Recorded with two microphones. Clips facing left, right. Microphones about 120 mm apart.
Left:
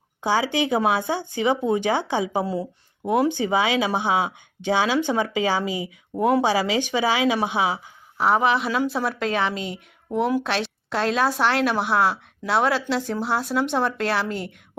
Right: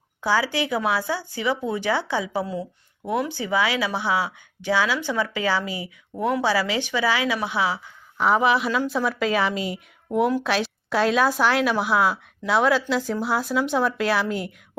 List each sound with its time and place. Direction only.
0.2 s speech: 20° left (ahead or behind)
8.2 s a woman's voice: centre (ahead or behind)